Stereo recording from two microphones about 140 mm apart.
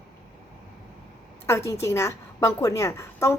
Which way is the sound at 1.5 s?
20° left (ahead or behind).